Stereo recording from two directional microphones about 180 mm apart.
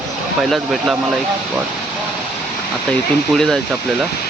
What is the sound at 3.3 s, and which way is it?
Speech, centre (ahead or behind).